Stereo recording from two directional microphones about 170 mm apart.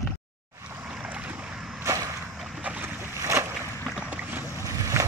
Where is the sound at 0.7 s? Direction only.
5° right (ahead or behind).